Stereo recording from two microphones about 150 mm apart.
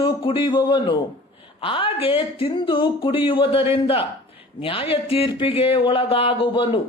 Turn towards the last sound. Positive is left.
turn(degrees=35)  # may be behind; listen again after turning